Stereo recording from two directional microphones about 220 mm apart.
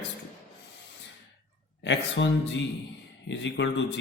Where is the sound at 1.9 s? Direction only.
55° left (ahead or behind).